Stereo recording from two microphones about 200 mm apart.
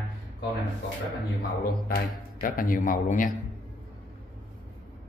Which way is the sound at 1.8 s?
50° left (ahead or behind).